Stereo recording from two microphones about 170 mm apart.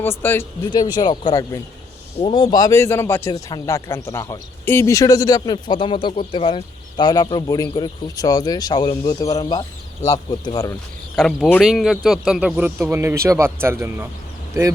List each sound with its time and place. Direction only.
0.0 s speech: 10° left (ahead or behind)
0.9 s a man's voice: 25° left (ahead or behind)
11.2 s speech: 5° left (ahead or behind); by 14.1 s 15° right (ahead or behind)